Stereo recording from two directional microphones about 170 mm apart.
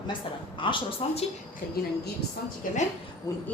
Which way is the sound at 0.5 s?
30° left (ahead or behind).